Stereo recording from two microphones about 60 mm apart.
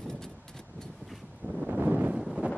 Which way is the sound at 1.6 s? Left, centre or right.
Right.